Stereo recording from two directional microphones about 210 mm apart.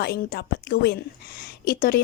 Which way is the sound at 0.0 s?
50° left (ahead or behind).